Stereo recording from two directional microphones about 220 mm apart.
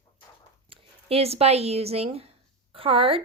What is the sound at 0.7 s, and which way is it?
A woman's voice, 25° right (ahead or behind).